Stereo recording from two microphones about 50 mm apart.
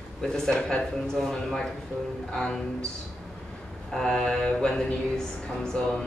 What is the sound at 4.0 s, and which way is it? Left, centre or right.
Speech, centre.